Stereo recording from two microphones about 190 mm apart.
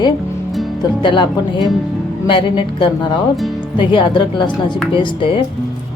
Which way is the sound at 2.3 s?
25° left (ahead or behind).